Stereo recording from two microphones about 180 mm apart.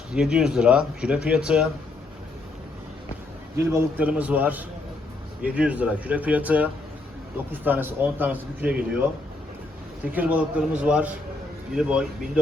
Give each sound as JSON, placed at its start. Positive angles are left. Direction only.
{"t": 0.1, "sound": "speech", "side_deg": -5}
{"t": 3.7, "sound": "a man's voice", "side_deg": -10}
{"t": 10.1, "sound": "a man's voice", "side_deg": -10}